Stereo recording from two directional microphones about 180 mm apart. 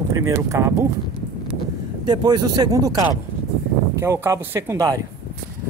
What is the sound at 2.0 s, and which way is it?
Speech, 25° right (ahead or behind).